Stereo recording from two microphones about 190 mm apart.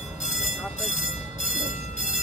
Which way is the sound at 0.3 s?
40° left (ahead or behind).